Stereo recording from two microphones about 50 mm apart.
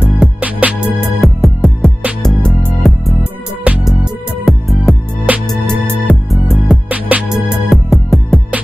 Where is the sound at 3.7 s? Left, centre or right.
Right.